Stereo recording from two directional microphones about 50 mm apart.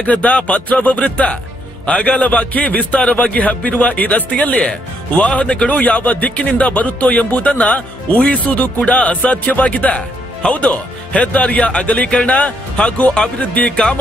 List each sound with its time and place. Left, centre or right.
0.0 s a man's voice: left
13.7 s speech: centre